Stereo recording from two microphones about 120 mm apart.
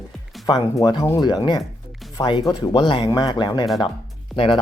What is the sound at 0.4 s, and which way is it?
Speech, 35° left (ahead or behind).